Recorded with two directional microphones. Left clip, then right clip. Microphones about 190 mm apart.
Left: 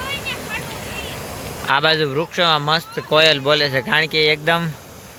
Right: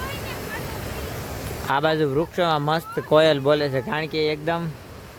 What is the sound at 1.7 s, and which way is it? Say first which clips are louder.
Speech: left 5 dB; 10° right (ahead or behind).